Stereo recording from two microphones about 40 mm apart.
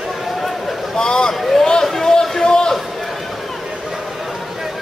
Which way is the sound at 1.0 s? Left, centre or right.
Centre.